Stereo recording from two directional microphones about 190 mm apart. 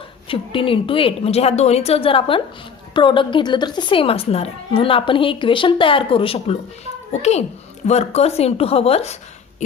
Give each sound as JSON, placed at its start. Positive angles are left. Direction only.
{"t": 0.3, "sound": "a woman's voice", "side_deg": 30}